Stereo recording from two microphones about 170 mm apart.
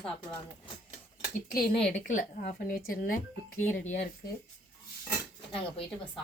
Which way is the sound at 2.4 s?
60° left (ahead or behind).